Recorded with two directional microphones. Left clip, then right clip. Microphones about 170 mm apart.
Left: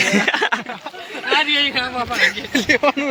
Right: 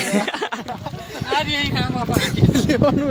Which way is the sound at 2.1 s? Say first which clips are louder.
Left 3 dB; 90° right.